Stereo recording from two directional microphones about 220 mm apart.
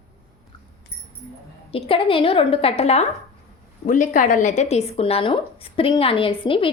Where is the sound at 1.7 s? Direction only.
25° left (ahead or behind).